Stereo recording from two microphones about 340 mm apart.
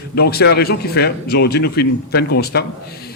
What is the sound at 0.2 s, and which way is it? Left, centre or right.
A man's voice, left.